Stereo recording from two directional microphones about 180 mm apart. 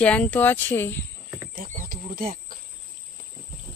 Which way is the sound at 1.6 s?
50° right (ahead or behind).